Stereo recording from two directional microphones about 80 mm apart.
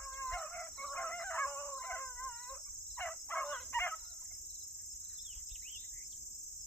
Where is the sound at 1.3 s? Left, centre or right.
Left.